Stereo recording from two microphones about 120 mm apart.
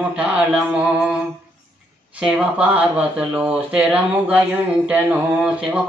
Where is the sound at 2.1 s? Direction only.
10° right (ahead or behind).